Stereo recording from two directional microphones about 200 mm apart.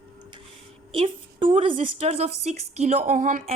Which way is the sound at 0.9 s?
25° right (ahead or behind).